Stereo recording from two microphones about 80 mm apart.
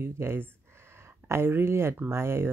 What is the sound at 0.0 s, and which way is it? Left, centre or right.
Speech, right.